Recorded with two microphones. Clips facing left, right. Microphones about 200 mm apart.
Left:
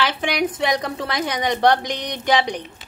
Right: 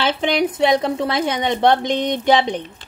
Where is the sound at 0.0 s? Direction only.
25° right (ahead or behind).